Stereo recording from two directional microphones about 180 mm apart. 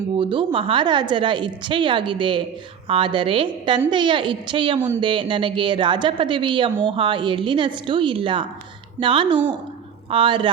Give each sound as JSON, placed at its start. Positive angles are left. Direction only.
{"t": 0.2, "sound": "a woman's voice", "side_deg": -30}